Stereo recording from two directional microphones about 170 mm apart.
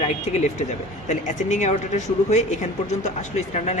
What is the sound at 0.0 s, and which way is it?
A man's voice, 40° left (ahead or behind).